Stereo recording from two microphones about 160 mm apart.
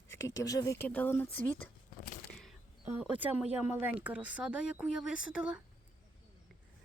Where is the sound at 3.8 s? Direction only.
10° right (ahead or behind).